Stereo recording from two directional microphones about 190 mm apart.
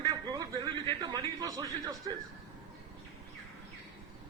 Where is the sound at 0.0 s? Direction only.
20° right (ahead or behind).